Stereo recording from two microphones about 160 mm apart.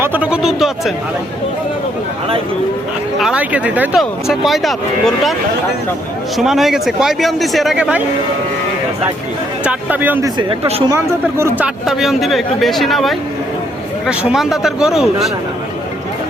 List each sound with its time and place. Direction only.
0.0 s speech: 10° right (ahead or behind)
3.2 s speech: 5° right (ahead or behind)
6.3 s speech: centre (ahead or behind)
9.6 s speech: 10° right (ahead or behind)
10.2 s speech: 30° right (ahead or behind)
10.9 s speech: 15° right (ahead or behind)